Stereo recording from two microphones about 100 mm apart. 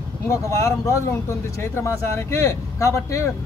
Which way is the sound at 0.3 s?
30° left (ahead or behind).